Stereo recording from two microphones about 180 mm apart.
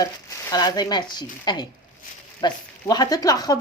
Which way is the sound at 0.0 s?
20° left (ahead or behind).